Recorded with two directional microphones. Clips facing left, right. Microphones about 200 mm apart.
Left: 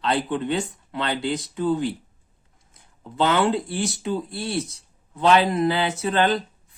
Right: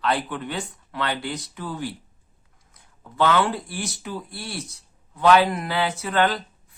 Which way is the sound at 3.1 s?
25° left (ahead or behind).